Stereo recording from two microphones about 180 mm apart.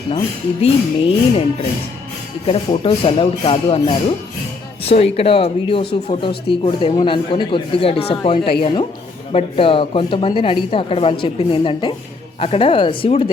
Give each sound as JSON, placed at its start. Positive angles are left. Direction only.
{"t": 0.6, "sound": "speech", "side_deg": 35}
{"t": 2.5, "sound": "a woman's voice", "side_deg": 35}